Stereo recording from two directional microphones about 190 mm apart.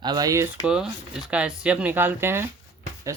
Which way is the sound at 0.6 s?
5° right (ahead or behind).